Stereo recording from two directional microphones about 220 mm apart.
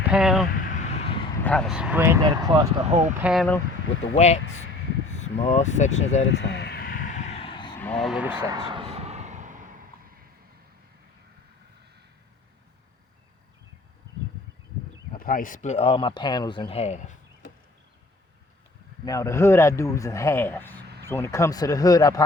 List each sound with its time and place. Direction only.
0.1 s speech: centre (ahead or behind)
0.5 s vehicle: 35° left (ahead or behind)
1.5 s speech: centre (ahead or behind); by 2.5 s 20° right (ahead or behind)
2.9 s speech: 30° right (ahead or behind)
3.2 s speech: 5° right (ahead or behind)
4.1 s speech: 30° left (ahead or behind)
6.2 s a sound: 50° left (ahead or behind); by 7.8 s 20° left (ahead or behind)
7.8 s speech: 5° left (ahead or behind)
8.5 s a sound: 20° right (ahead or behind)
15.2 s speech: 40° left (ahead or behind)
19.0 s a man's voice: 15° left (ahead or behind)